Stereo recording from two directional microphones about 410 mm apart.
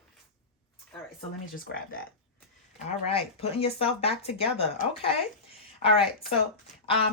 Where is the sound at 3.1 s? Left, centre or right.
Centre.